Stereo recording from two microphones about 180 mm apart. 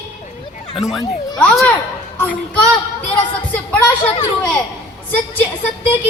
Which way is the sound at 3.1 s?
10° left (ahead or behind).